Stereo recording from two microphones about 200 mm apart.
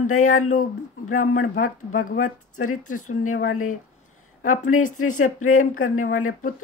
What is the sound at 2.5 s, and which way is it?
Speech, 90° left.